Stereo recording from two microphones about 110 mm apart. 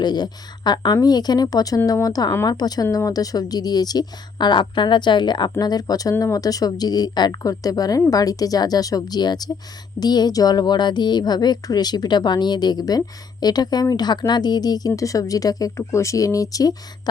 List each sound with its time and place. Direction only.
0.0 s a woman's voice: 40° left (ahead or behind)